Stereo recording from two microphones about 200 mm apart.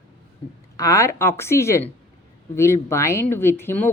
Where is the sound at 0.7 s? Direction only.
15° left (ahead or behind).